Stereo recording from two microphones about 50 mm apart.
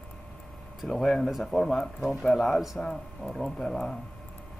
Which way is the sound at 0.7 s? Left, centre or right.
Centre.